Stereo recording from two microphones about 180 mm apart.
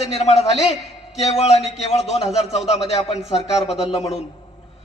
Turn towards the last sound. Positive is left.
turn(degrees=35)  # may be behind; listen again after turning